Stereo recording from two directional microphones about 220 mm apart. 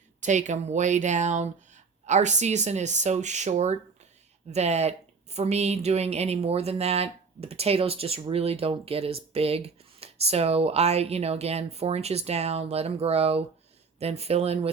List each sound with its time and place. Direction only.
0.2 s speech: 35° right (ahead or behind)